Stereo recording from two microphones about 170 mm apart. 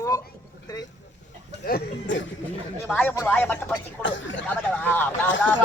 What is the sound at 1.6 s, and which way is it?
Speech, 75° left (ahead or behind).